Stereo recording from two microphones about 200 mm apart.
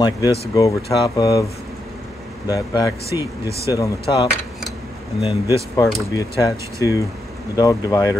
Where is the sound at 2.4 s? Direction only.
20° left (ahead or behind).